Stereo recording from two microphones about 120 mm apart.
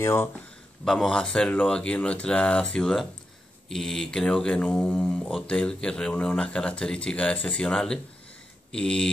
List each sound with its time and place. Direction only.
0.0 s speech: 20° left (ahead or behind)
0.8 s speech: 5° left (ahead or behind)
8.7 s a sound: 5° left (ahead or behind)